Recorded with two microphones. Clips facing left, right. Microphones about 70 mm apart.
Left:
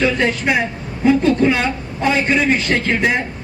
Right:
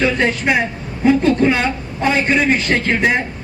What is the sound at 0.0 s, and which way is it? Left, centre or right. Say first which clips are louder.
A man's voice: even; right.